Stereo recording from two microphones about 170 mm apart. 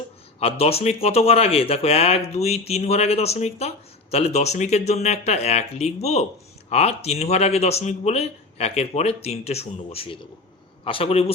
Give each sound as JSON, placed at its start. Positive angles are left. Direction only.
{"t": 0.3, "sound": "speech", "side_deg": 35}